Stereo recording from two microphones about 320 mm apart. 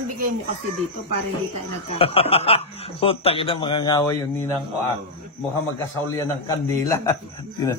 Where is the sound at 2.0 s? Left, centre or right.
Centre.